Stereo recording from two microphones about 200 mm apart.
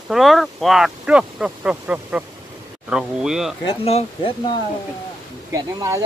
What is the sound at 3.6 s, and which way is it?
Speech, 30° left (ahead or behind).